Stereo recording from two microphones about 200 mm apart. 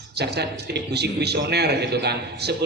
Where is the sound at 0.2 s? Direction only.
55° right (ahead or behind).